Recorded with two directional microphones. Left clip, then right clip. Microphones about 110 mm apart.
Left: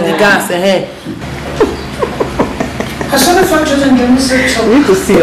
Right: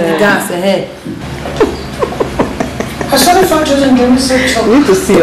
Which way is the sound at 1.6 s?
15° right (ahead or behind).